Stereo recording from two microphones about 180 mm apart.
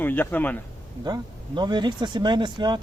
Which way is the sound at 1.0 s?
25° right (ahead or behind).